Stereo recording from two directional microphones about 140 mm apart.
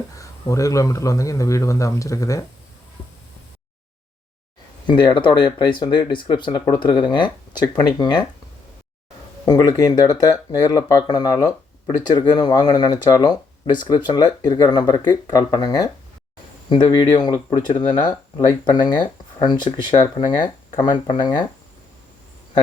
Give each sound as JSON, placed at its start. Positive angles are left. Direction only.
{"t": 0.2, "sound": "a man's voice", "side_deg": 25}
{"t": 4.9, "sound": "speech", "side_deg": 35}
{"t": 9.5, "sound": "a man's voice", "side_deg": 25}